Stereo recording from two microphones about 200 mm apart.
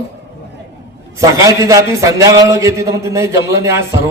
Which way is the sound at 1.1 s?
15° right (ahead or behind).